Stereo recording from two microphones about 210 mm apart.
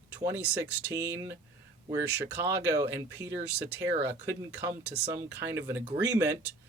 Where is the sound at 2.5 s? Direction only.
15° right (ahead or behind).